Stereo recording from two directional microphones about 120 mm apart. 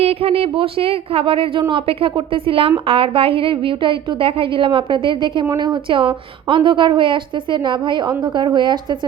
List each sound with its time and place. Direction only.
0.0 s a woman's voice: 55° right (ahead or behind); by 9.0 s 40° right (ahead or behind)